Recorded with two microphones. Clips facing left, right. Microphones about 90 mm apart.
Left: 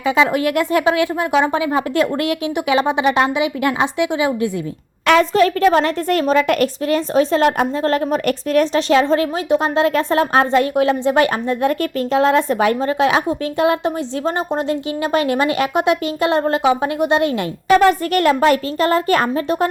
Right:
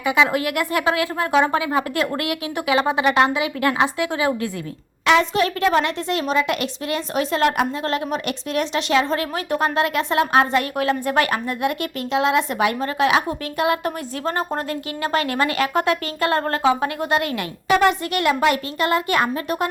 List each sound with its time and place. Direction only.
0.0 s speech: 30° left (ahead or behind)
5.0 s a woman's voice: 45° left (ahead or behind)
7.9 s a woman's voice: 40° left (ahead or behind)
9.5 s speech: 25° left (ahead or behind)
17.7 s a woman's voice: 40° left (ahead or behind)